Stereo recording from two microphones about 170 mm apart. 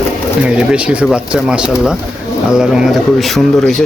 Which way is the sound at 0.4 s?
5° right (ahead or behind).